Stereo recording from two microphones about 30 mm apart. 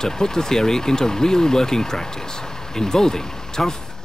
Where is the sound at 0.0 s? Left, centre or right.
Centre.